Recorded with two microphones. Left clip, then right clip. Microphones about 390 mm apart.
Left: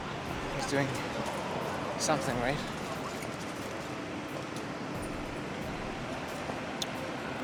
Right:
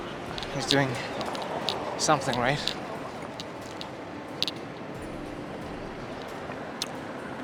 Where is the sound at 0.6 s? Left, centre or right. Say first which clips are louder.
Right 7 dB; right.